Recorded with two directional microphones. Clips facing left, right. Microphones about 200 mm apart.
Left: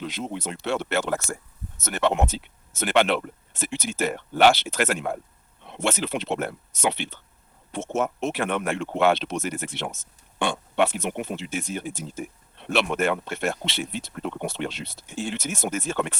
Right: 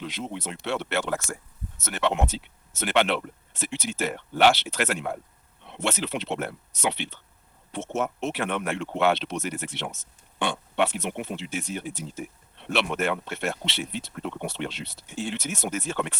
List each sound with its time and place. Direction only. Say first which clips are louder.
0.0 s speech: left 2 dB; 45° left (ahead or behind)